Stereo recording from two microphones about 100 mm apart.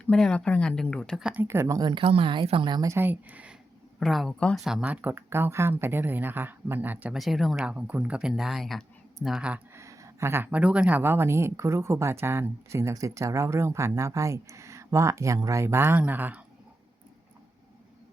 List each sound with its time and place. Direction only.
0.0 s speech: 10° left (ahead or behind)
1.2 s speech: 15° right (ahead or behind)
1.6 s speech: 35° right (ahead or behind)
1.9 s speech: 65° right (ahead or behind)
2.8 s speech: 25° right (ahead or behind)
4.0 s speech: centre (ahead or behind)
4.9 s speech: 20° right (ahead or behind)
7.1 s speech: centre (ahead or behind)
9.7 s speech: 30° right (ahead or behind)